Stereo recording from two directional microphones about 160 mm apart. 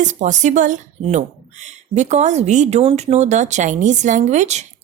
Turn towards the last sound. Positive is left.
turn(degrees=-45)  # may be behind; listen again after turning